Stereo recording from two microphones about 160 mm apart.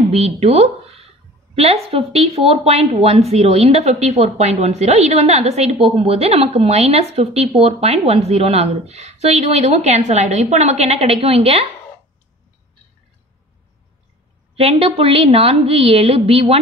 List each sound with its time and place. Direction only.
0.1 s a sound: 40° right (ahead or behind)
2.1 s a woman's voice: 40° right (ahead or behind)
14.5 s a woman's voice: 40° right (ahead or behind)